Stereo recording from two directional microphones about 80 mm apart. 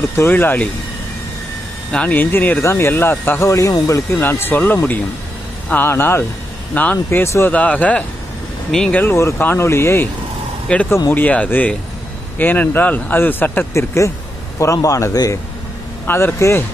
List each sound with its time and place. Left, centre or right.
0.1 s speech: left
1.9 s speech: centre
2.6 s speech: left
3.4 s speech: left
4.2 s speech: left
5.9 s speech: left
6.7 s speech: centre
9.0 s speech: left
10.7 s speech: centre
13.7 s speech: left
16.3 s speech: left